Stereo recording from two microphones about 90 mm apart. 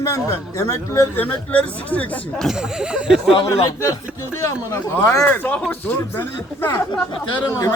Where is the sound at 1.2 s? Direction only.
15° left (ahead or behind).